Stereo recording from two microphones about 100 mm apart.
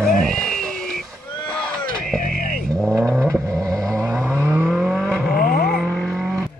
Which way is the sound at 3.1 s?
25° right (ahead or behind).